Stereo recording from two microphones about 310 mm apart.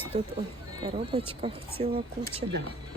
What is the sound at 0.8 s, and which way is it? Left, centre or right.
Speech, centre.